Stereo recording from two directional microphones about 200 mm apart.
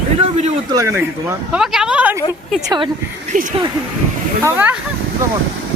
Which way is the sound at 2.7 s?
25° right (ahead or behind).